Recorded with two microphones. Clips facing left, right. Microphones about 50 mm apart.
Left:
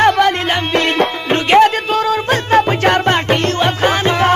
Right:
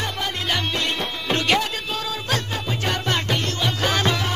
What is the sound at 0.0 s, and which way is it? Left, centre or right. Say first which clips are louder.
Music: left 15 dB; left.